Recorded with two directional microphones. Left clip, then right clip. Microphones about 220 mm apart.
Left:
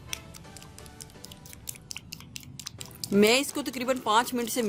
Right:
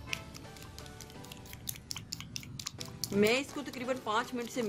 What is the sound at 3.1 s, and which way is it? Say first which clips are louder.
Speech: left 7 dB; 50° left (ahead or behind).